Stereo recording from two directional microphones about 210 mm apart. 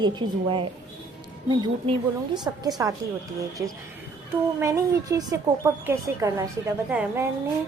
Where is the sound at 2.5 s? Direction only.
15° right (ahead or behind).